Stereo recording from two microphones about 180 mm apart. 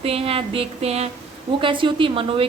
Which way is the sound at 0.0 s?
35° right (ahead or behind).